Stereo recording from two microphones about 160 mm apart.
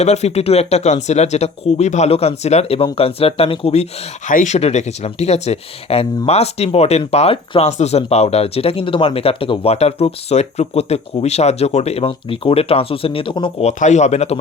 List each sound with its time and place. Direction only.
0.0 s speech: 45° left (ahead or behind)
4.3 s speech: 50° left (ahead or behind); by 13.7 s 30° left (ahead or behind)
13.7 s speech: 45° left (ahead or behind)